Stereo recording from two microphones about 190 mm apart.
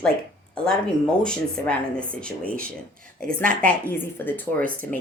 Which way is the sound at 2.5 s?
50° right (ahead or behind).